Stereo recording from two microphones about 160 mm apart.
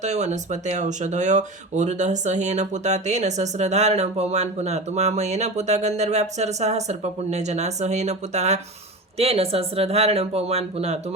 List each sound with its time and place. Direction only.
0.0 s speech: 45° right (ahead or behind)